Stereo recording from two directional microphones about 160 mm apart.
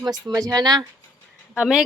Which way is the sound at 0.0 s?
25° right (ahead or behind).